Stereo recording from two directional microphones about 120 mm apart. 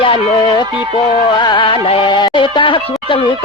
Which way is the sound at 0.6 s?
40° left (ahead or behind).